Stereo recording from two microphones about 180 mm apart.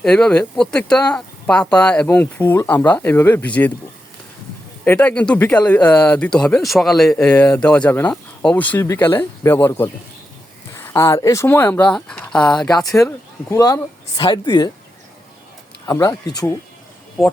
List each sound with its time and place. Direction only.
0.0 s speech: 5° left (ahead or behind)
4.9 s speech: 5° left (ahead or behind)
7.3 s speech: 15° left (ahead or behind)
13.0 s speech: 15° left (ahead or behind)
15.9 s speech: 20° left (ahead or behind)